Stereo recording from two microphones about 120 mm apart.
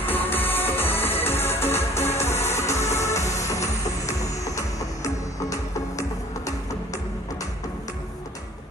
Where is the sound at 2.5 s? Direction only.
25° left (ahead or behind).